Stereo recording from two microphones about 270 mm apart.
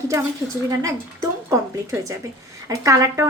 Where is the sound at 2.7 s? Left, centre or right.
Centre.